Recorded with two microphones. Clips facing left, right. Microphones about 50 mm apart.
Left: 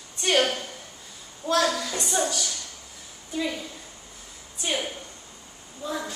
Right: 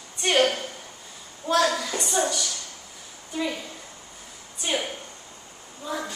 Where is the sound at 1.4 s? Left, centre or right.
Centre.